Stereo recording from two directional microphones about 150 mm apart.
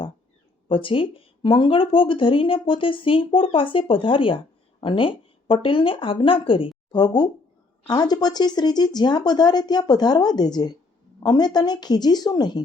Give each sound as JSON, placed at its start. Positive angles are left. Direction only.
{"t": 0.7, "sound": "speech", "side_deg": 35}